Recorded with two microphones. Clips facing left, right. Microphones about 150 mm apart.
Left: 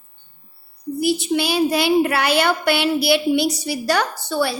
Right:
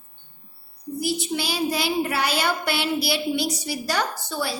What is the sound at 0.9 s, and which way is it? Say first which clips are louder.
Speech: left 7 dB; 65° left (ahead or behind).